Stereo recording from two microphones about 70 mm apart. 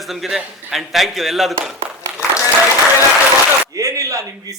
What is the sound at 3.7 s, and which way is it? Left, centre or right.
Speech, right.